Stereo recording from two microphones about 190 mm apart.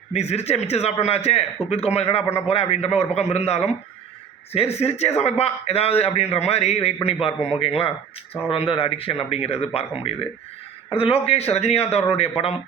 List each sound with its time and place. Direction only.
0.1 s speech: 35° left (ahead or behind)